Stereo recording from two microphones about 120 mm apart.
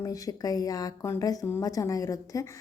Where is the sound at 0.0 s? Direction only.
30° left (ahead or behind).